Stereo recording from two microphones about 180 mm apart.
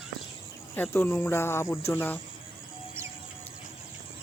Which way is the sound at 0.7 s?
10° left (ahead or behind).